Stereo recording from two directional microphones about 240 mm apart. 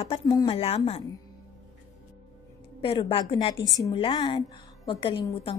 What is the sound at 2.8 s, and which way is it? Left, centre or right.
A woman's voice, left.